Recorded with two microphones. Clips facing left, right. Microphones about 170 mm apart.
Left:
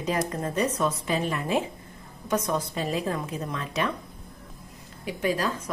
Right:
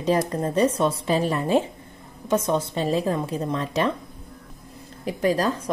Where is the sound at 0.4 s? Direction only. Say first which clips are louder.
Right 5 dB; 30° right (ahead or behind).